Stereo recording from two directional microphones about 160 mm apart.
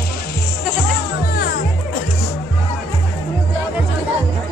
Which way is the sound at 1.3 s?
65° left (ahead or behind).